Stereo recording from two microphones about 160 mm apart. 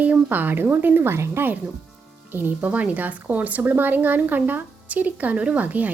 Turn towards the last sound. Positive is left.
turn(degrees=-10)  # may be behind; listen again after turning